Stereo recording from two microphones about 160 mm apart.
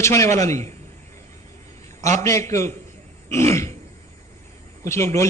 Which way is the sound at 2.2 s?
20° left (ahead or behind).